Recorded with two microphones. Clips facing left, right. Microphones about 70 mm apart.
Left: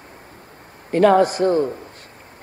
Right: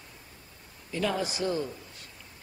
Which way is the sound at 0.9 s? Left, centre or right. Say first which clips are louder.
Left 16 dB; left.